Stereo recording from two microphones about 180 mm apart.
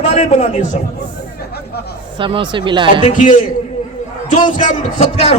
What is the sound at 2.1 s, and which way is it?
Speech, 25° right (ahead or behind).